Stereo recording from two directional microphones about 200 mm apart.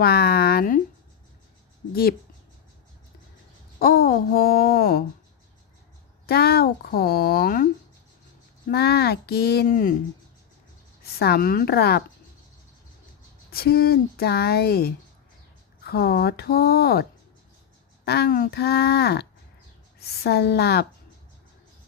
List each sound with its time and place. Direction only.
0.0 s a sound: 50° left (ahead or behind)
3.8 s speech: 50° left (ahead or behind)
6.2 s speech: 50° left (ahead or behind)
11.0 s speech: 50° left (ahead or behind)
13.5 s speech: 50° left (ahead or behind)